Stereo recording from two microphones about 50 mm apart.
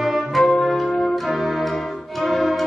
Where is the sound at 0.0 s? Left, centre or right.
Centre.